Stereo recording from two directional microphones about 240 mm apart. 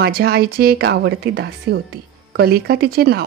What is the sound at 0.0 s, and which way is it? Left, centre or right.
A woman's voice, right.